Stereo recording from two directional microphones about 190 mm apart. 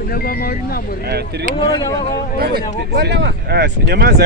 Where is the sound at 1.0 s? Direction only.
55° right (ahead or behind).